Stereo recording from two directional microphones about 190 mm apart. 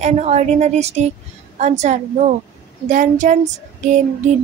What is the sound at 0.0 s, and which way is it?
Female singing, 35° right (ahead or behind).